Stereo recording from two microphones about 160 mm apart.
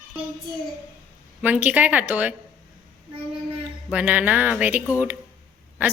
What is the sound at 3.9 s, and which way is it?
Speech, 10° right (ahead or behind).